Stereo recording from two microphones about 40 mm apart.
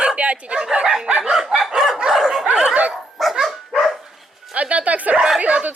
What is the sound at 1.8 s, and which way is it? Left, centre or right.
Dog, centre.